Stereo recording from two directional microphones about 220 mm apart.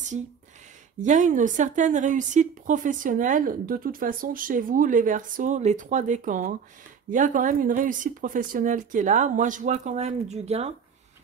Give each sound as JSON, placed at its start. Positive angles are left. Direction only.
{"t": 1.0, "sound": "a woman's voice", "side_deg": -35}